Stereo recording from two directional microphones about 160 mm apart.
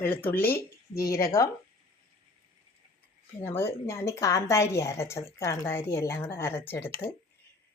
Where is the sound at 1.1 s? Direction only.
20° left (ahead or behind).